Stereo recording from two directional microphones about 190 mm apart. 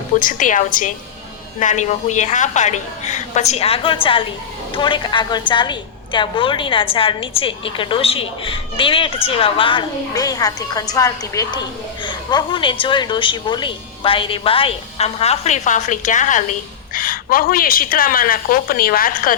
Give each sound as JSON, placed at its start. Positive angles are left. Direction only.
{"t": 0.2, "sound": "a woman's voice", "side_deg": 45}